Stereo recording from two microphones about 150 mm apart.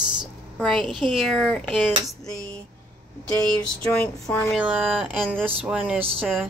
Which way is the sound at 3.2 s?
5° left (ahead or behind).